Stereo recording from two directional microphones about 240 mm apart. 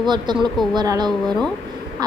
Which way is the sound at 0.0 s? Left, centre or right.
Centre.